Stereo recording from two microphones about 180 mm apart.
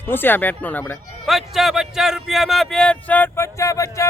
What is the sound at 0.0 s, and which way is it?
Speech, 10° left (ahead or behind).